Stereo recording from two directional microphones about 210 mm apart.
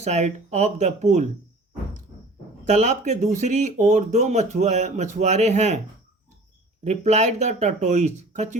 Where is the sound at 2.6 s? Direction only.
35° right (ahead or behind).